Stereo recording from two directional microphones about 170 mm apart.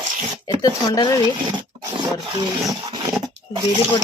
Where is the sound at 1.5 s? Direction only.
25° right (ahead or behind).